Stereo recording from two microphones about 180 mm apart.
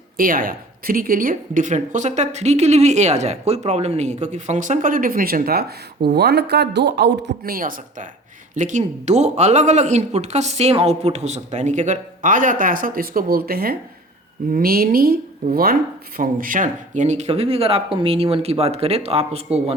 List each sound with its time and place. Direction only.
0.2 s speech: 50° right (ahead or behind); by 19.4 s 35° right (ahead or behind)